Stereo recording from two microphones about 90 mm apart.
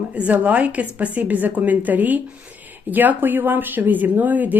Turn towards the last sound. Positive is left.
turn(degrees=-20)  # may be behind; listen again after turning